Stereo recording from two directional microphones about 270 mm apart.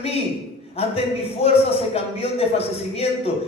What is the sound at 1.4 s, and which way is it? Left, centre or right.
A man's voice, left.